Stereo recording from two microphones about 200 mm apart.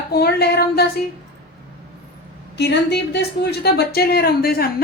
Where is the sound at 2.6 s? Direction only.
55° left (ahead or behind).